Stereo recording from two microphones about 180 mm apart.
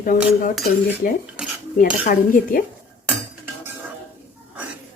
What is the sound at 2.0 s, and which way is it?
Speech, 50° left (ahead or behind).